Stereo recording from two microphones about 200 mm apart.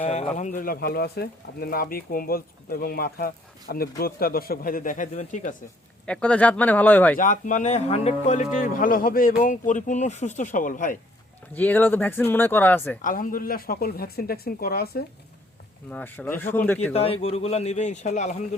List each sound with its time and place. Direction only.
0.0 s speech: 35° left (ahead or behind)
6.1 s speech: 5° left (ahead or behind)
7.2 s speech: 40° left (ahead or behind)
11.5 s speech: 10° left (ahead or behind)
13.0 s speech: 40° left (ahead or behind)
15.9 s speech: 10° left (ahead or behind)
16.9 s speech: 30° left (ahead or behind)